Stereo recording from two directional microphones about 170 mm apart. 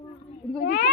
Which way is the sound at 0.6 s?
70° left (ahead or behind).